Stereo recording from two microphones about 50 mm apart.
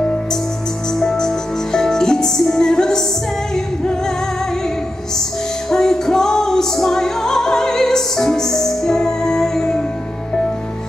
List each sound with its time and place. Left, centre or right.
0.0 s music: centre
5.7 s music: centre